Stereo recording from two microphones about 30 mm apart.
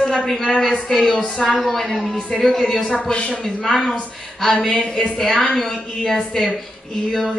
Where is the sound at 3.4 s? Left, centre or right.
Centre.